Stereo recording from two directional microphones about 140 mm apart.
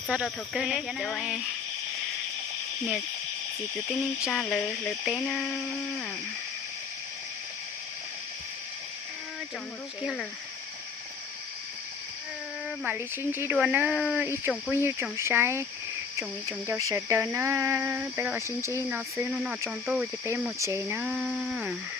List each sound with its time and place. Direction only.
0.1 s speech: 5° right (ahead or behind)
3.8 s speech: centre (ahead or behind)
12.8 s speech: 10° right (ahead or behind)
14.7 s speech: 15° right (ahead or behind)
16.1 s a sound: 20° right (ahead or behind)
20.6 s speech: 20° right (ahead or behind); by 21.8 s 5° right (ahead or behind)